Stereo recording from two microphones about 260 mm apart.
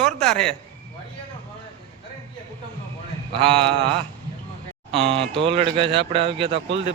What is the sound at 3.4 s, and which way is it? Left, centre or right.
Speech, centre.